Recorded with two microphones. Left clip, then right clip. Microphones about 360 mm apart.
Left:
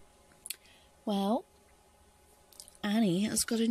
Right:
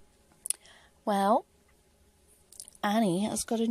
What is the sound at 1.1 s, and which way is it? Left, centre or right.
Speech, right.